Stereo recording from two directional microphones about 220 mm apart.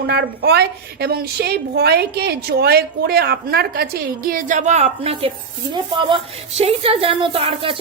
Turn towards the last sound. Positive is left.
turn(degrees=-25)  # may be behind; listen again after turning